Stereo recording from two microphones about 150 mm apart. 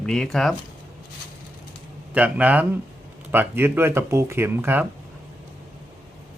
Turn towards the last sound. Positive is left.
turn(degrees=-15)  # may be behind; listen again after turning